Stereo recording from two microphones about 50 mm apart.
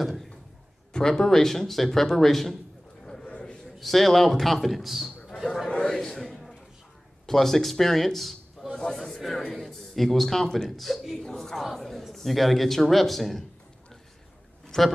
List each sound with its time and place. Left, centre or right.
0.0 s speech: centre
0.9 s speech: centre
3.3 s a sound: left
3.8 s a man's voice: centre
5.7 s a sound: centre
7.2 s a man's voice: centre
14.7 s speech: centre